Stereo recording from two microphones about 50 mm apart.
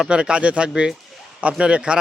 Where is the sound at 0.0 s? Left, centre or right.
Centre.